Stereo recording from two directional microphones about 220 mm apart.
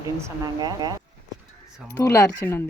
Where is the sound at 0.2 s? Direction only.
15° right (ahead or behind).